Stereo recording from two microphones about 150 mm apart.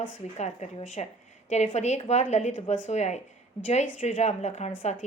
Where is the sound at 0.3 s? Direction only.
50° left (ahead or behind).